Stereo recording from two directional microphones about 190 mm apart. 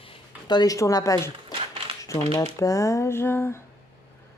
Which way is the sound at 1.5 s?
30° right (ahead or behind).